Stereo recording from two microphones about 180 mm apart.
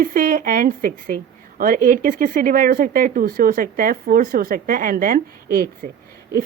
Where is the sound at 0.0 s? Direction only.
55° right (ahead or behind).